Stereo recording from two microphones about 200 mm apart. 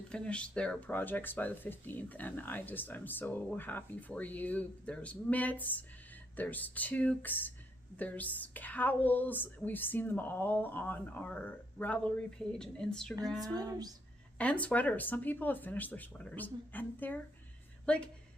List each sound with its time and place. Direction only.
0.1 s speech: 5° left (ahead or behind)
13.4 s speech: 20° right (ahead or behind)
14.3 s a woman's voice: 5° left (ahead or behind)